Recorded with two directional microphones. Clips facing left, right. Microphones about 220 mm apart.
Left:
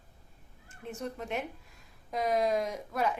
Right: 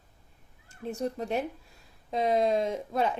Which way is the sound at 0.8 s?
35° right (ahead or behind).